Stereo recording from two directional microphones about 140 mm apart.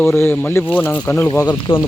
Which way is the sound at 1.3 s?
30° left (ahead or behind).